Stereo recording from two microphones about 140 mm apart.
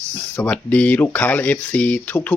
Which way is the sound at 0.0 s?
20° right (ahead or behind).